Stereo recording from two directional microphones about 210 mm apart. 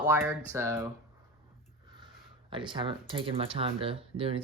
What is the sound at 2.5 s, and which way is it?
Speech, 25° right (ahead or behind).